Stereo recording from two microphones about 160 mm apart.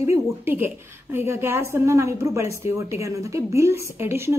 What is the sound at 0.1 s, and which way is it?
A woman's voice, 15° right (ahead or behind).